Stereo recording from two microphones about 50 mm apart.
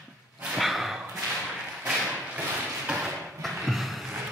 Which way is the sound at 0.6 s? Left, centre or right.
Centre.